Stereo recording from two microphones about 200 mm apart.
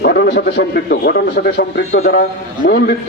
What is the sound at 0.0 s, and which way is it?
A man's voice, 50° left (ahead or behind).